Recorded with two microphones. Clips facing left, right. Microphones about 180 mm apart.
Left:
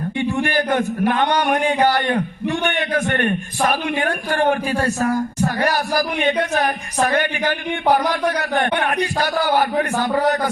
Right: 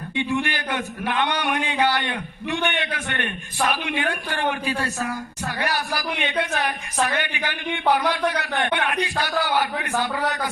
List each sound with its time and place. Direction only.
0.2 s a man's voice: 45° left (ahead or behind)